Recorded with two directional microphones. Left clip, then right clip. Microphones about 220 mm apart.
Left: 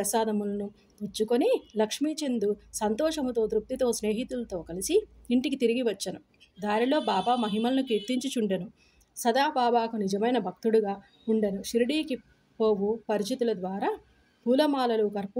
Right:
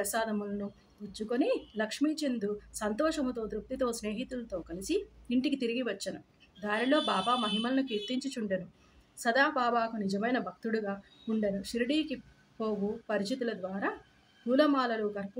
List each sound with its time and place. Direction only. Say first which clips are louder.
0.1 s speech: left 5 dB; 45° left (ahead or behind)